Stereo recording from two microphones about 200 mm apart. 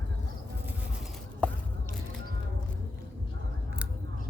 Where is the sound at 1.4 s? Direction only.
5° left (ahead or behind).